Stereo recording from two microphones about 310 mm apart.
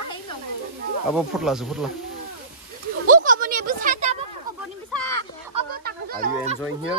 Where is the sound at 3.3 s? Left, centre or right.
Right.